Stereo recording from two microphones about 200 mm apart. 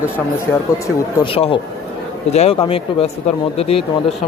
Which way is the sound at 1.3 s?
30° left (ahead or behind).